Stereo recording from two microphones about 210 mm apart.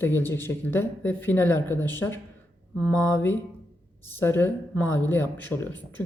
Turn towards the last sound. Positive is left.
turn(degrees=10)  # may be behind; listen again after turning